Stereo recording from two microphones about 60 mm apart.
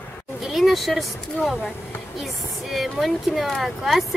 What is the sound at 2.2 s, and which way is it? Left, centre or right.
A child's voice, centre.